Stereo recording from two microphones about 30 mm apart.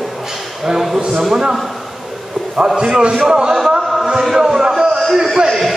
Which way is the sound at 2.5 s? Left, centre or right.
Right.